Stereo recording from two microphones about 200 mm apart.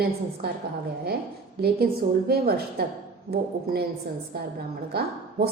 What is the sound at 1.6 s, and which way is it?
A woman's voice, 50° right (ahead or behind).